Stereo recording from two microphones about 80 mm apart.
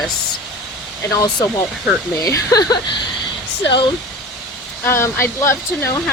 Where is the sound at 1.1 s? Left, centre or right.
Left.